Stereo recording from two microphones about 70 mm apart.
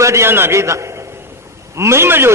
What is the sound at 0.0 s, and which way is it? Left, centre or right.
Speech, right.